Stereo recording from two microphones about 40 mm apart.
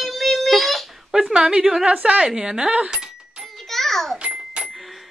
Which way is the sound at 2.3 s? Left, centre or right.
Centre.